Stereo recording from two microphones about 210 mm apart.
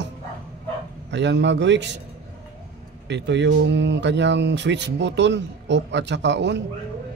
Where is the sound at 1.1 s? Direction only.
55° right (ahead or behind).